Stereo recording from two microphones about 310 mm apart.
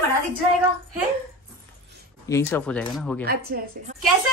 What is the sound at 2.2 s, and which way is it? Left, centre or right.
Speech, centre.